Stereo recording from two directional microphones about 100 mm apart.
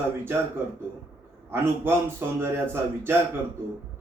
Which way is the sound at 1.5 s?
20° right (ahead or behind).